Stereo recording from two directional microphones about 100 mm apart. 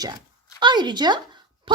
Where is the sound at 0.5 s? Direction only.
50° right (ahead or behind).